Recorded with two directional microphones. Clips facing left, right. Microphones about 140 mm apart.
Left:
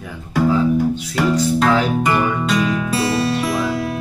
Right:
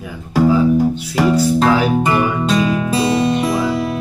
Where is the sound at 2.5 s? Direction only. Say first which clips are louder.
Right 3 dB; 30° right (ahead or behind).